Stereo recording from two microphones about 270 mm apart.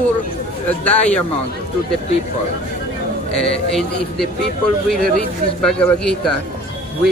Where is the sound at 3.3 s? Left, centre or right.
Centre.